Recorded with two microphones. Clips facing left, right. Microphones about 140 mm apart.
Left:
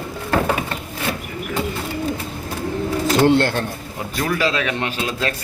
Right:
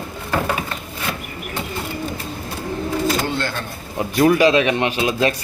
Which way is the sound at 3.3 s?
65° left (ahead or behind).